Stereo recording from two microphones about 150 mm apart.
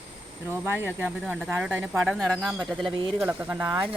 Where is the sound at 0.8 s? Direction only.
10° right (ahead or behind).